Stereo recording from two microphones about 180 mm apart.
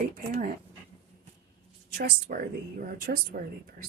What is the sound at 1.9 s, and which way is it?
Speech, 60° right (ahead or behind).